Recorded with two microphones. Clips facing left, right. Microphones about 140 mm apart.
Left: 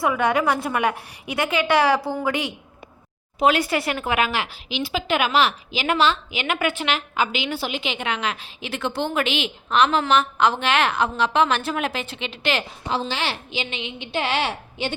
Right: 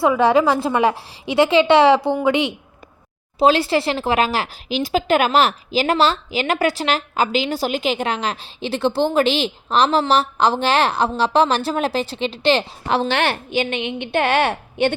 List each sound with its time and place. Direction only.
0.0 s a woman's voice: 30° right (ahead or behind)
12.9 s a woman's voice: 65° right (ahead or behind)